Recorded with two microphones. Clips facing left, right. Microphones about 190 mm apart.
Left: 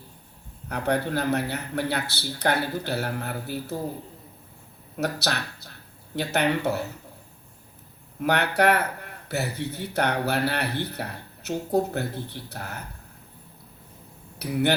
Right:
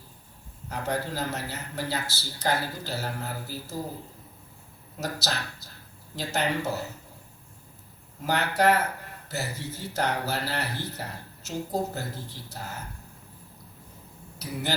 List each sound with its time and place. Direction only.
0.7 s a man's voice: 65° left (ahead or behind)
4.9 s a man's voice: 65° left (ahead or behind)
8.2 s a man's voice: 65° left (ahead or behind)
14.3 s speech: 65° left (ahead or behind)